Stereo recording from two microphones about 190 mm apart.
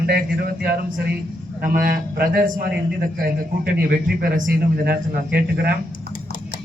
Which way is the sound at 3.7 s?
50° right (ahead or behind).